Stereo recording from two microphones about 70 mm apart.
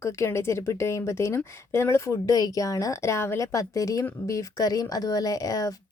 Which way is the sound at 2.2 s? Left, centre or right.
Left.